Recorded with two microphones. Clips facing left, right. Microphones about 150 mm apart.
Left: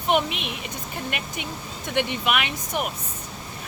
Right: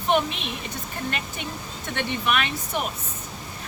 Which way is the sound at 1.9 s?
15° left (ahead or behind).